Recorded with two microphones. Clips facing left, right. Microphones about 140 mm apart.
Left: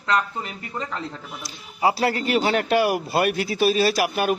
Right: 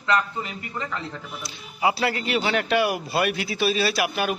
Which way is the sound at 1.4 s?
40° left (ahead or behind).